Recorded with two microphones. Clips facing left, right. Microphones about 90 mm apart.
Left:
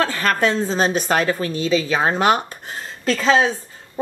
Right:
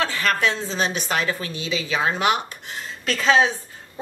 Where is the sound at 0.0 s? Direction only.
40° left (ahead or behind).